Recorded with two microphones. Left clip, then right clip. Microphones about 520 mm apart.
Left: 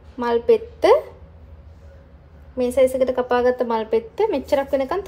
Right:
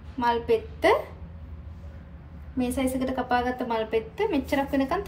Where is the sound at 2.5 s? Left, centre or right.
Centre.